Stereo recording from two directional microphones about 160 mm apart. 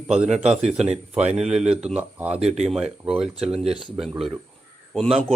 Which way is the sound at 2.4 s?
45° right (ahead or behind).